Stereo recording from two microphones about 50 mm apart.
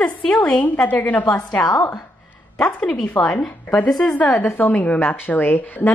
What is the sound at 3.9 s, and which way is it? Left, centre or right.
Speech, centre.